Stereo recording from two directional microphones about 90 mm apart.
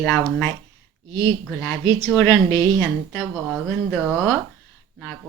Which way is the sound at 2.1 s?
30° left (ahead or behind).